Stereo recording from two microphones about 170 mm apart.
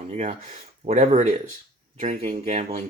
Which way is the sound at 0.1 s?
40° right (ahead or behind).